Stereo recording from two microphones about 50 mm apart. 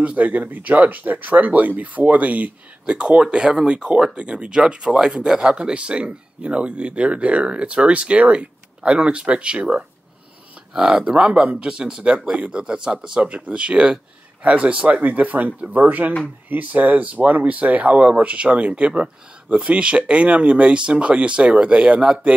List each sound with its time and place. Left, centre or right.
0.0 s speech: right
10.7 s speech: centre
11.1 s speech: right